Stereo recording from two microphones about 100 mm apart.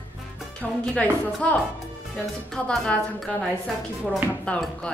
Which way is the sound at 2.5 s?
5° left (ahead or behind).